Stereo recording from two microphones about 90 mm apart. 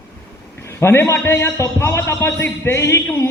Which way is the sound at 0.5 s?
30° left (ahead or behind).